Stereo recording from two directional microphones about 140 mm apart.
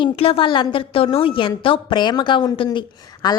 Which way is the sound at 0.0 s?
40° left (ahead or behind).